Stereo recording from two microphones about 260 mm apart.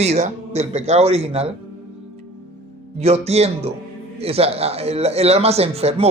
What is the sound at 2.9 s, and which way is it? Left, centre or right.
Speech, right.